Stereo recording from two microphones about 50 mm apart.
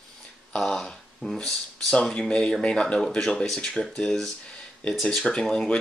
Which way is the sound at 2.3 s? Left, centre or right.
Centre.